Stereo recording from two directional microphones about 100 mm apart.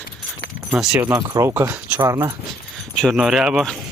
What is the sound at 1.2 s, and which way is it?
Speech, 35° right (ahead or behind).